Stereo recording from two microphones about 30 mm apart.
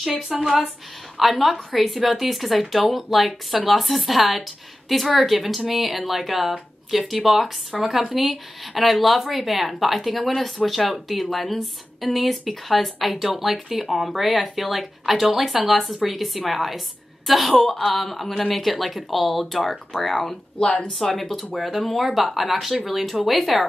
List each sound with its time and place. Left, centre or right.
0.3 s speech: centre
20.6 s speech: left
21.1 s speech: centre